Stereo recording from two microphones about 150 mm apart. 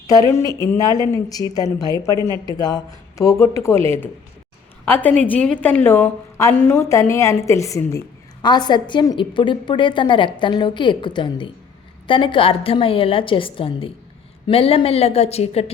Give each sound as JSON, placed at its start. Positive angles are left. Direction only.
{"t": 0.1, "sound": "a woman's voice", "side_deg": 20}
{"t": 2.1, "sound": "speech", "side_deg": -30}
{"t": 2.6, "sound": "a woman's voice", "side_deg": 25}